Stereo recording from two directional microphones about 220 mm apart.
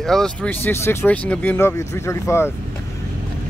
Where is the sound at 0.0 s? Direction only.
5° left (ahead or behind).